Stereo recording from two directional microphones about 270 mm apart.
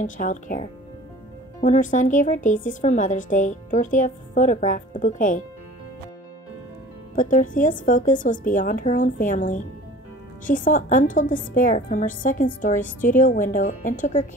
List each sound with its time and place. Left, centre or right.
0.0 s speech: left
7.2 s speech: left